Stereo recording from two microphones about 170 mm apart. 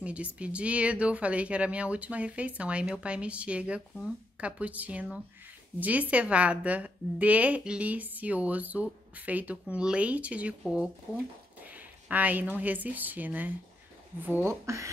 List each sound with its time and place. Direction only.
0.0 s a woman's voice: 5° right (ahead or behind)